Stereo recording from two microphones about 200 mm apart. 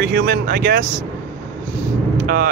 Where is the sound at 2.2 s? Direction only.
45° right (ahead or behind).